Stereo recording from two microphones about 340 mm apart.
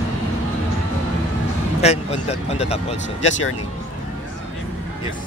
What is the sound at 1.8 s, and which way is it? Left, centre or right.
Speech, centre.